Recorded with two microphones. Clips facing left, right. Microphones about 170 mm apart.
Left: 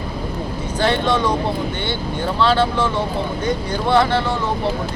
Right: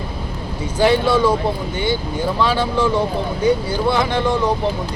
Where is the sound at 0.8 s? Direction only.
10° right (ahead or behind).